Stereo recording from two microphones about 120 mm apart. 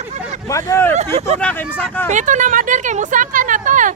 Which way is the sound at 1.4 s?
15° left (ahead or behind).